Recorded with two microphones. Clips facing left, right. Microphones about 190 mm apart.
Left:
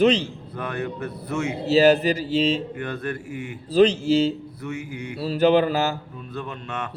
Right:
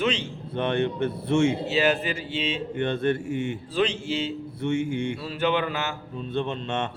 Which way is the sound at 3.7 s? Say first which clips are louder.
Left 11 dB; 40° left (ahead or behind).